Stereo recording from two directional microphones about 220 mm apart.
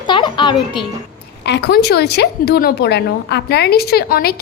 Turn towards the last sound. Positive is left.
turn(degrees=45)  # may be behind; listen again after turning